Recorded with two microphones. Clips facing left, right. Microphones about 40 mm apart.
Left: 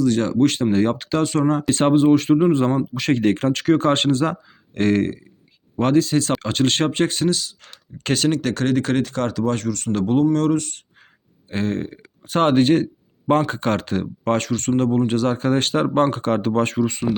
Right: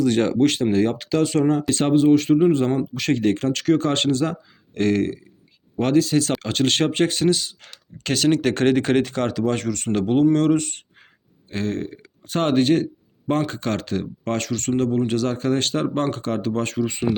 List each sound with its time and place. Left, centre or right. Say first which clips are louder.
0.0 s speech: even; centre
0.4 s speech: left 1 dB; centre
1.8 s speech: left 1 dB; centre
3.2 s speech: left 2 dB; left
5.8 s speech: left 1 dB; centre
7.7 s speech: left 3 dB; centre
8.3 s speech: right 6 dB; centre
11.4 s a man's voice: left 2 dB; centre
16.2 s speech: left 4 dB; left